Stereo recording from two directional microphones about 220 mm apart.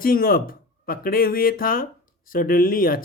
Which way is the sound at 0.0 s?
40° left (ahead or behind).